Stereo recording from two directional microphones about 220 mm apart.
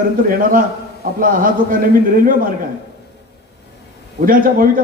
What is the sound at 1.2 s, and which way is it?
A man's voice, 40° right (ahead or behind).